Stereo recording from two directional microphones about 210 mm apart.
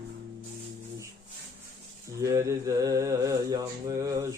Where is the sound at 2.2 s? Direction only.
15° right (ahead or behind).